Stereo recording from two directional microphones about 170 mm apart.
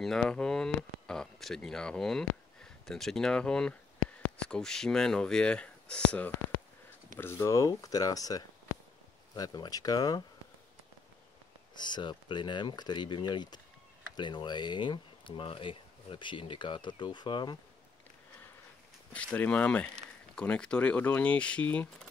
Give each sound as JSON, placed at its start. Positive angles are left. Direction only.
{"t": 0.0, "sound": "speech", "side_deg": 5}
{"t": 11.7, "sound": "speech", "side_deg": 25}
{"t": 19.1, "sound": "speech", "side_deg": 10}